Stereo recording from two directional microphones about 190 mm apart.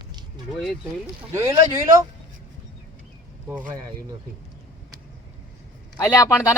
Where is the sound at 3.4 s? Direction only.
10° right (ahead or behind).